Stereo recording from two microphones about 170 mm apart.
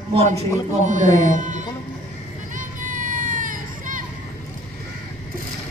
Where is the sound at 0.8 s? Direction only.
45° right (ahead or behind).